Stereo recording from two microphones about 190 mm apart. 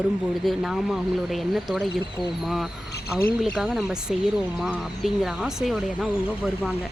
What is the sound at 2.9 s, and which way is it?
Speech, 50° left (ahead or behind).